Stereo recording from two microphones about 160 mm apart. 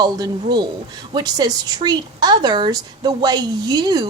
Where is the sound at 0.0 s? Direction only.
25° right (ahead or behind).